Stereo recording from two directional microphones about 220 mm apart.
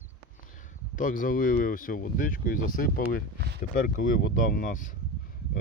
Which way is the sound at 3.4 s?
50° right (ahead or behind).